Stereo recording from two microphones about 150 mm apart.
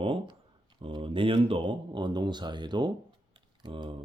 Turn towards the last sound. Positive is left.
turn(degrees=-30)  # may be behind; listen again after turning